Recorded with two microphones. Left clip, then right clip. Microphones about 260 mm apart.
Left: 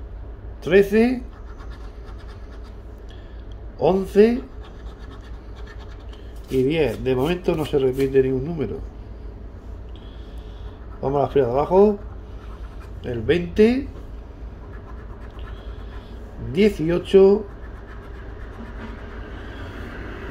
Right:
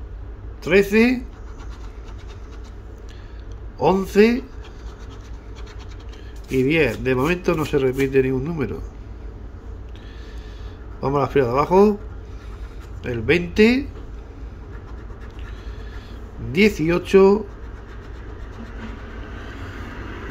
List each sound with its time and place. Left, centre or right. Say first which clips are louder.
0.7 s speech: even; centre
3.8 s speech: even; centre
6.5 s speech: right 2 dB; centre
11.1 s speech: right 1 dB; centre
13.0 s speech: right 2 dB; centre
16.5 s speech: right 1 dB; centre